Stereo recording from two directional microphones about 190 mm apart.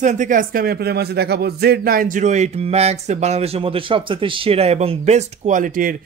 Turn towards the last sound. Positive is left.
turn(degrees=-45)  # may be behind; listen again after turning